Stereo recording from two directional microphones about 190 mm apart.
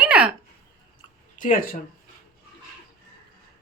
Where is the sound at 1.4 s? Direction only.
45° left (ahead or behind).